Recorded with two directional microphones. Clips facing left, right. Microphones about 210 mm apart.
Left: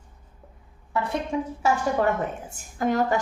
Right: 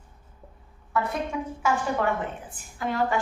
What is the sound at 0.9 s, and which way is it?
Speech, 30° left (ahead or behind).